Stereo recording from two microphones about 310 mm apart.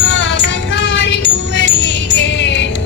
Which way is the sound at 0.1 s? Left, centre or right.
Left.